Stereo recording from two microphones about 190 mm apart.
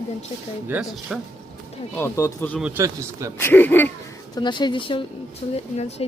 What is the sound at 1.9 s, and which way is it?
Speech, 15° left (ahead or behind).